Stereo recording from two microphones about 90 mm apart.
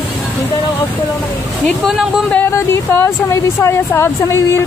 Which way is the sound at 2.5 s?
25° left (ahead or behind).